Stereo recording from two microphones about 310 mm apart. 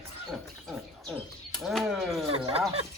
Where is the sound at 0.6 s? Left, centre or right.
Centre.